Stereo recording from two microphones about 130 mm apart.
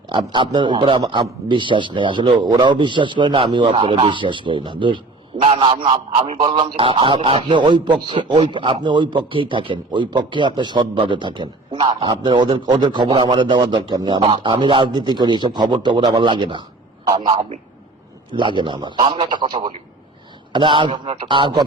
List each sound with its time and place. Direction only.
0.1 s a man's voice: 40° right (ahead or behind)